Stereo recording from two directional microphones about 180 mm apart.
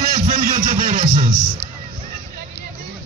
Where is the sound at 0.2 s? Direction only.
45° right (ahead or behind).